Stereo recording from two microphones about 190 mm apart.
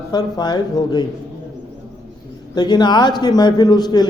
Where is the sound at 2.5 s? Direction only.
20° left (ahead or behind).